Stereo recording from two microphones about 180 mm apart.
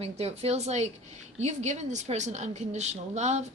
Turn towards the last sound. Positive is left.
turn(degrees=-40)  # may be behind; listen again after turning